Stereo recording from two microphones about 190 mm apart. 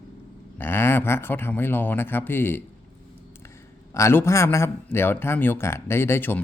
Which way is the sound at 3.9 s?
15° left (ahead or behind).